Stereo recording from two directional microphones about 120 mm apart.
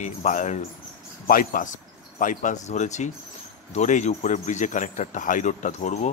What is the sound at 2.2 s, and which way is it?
Speech, 90° left.